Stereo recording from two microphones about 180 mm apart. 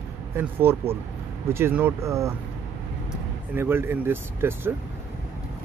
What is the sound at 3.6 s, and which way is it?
Speech, 10° right (ahead or behind).